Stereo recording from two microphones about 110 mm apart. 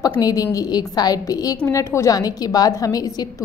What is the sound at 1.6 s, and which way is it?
A woman's voice, 25° left (ahead or behind).